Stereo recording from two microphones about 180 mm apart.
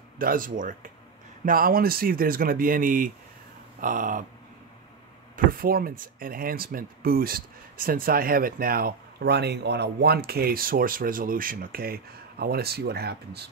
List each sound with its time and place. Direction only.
0.2 s speech: 50° right (ahead or behind)
5.3 s speech: 55° right (ahead or behind)